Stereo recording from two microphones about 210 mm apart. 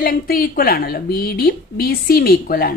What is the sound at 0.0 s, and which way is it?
A woman's voice, 45° left (ahead or behind).